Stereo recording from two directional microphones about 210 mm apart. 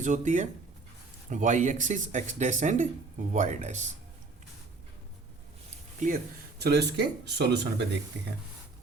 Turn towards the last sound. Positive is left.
turn(degrees=-55)  # may be behind; listen again after turning